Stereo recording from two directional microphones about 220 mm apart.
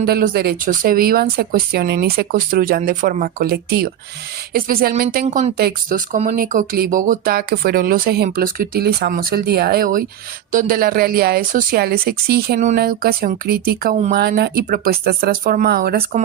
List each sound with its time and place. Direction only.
0.0 s speech: 45° right (ahead or behind)